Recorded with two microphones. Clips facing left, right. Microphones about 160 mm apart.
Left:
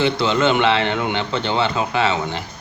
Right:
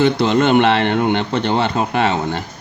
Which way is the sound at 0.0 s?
55° right (ahead or behind).